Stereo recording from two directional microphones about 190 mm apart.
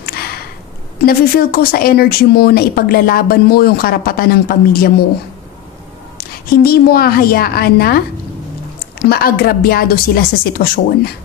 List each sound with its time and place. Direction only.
1.0 s speech: 50° left (ahead or behind)
6.1 s a woman's voice: 55° left (ahead or behind)
9.0 s speech: 55° left (ahead or behind)